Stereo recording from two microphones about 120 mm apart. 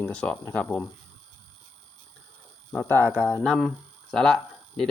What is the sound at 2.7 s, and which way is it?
Speech, 15° left (ahead or behind).